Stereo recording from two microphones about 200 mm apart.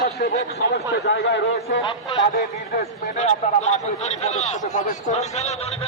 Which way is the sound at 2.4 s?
40° left (ahead or behind).